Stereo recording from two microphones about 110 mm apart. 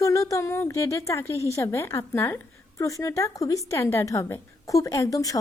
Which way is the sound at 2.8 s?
30° left (ahead or behind).